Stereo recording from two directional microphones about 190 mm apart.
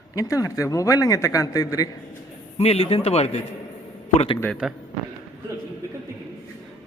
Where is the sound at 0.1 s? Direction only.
20° left (ahead or behind).